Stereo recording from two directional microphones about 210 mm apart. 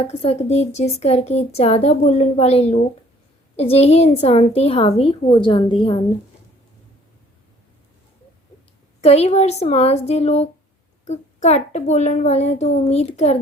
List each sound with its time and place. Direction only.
0.0 s a woman's voice: 30° left (ahead or behind)
9.0 s a woman's voice: 30° left (ahead or behind)